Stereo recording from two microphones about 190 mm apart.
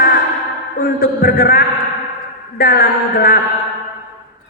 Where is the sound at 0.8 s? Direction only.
50° left (ahead or behind).